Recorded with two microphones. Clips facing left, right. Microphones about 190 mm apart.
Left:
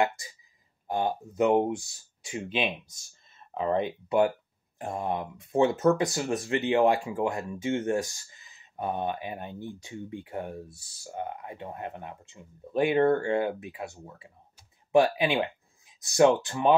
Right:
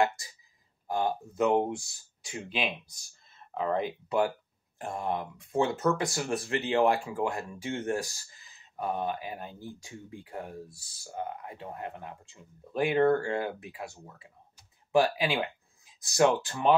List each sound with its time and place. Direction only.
0.8 s speech: 20° left (ahead or behind)